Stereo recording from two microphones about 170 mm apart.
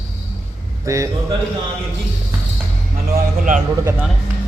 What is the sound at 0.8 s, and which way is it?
Speech, 15° right (ahead or behind).